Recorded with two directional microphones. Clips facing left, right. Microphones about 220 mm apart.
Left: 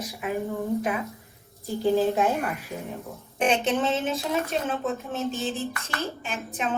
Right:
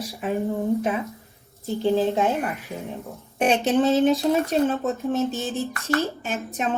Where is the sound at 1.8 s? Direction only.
25° right (ahead or behind).